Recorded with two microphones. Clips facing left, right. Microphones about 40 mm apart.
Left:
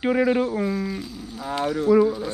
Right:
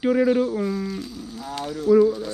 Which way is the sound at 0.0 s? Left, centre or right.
Left.